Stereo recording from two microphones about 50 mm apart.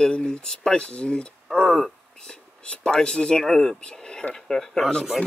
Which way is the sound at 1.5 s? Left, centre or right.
Centre.